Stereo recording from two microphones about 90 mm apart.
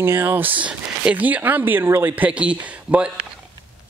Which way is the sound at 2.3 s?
15° right (ahead or behind).